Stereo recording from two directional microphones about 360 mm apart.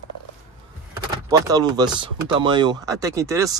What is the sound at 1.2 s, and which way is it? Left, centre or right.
Speech, centre.